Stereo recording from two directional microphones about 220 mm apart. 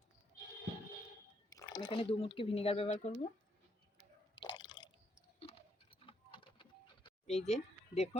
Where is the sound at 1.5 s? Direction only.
15° left (ahead or behind).